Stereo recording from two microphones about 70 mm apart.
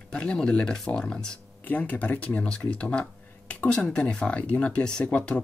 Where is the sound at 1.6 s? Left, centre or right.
Left.